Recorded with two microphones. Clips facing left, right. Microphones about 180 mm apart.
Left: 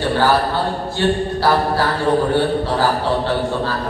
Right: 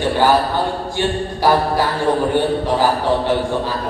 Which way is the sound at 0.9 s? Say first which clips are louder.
Left 5 dB; 15° right (ahead or behind).